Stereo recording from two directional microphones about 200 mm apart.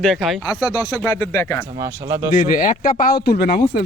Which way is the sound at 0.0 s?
Centre (ahead or behind).